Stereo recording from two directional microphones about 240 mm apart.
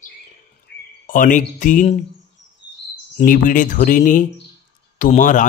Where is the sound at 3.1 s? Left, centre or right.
Left.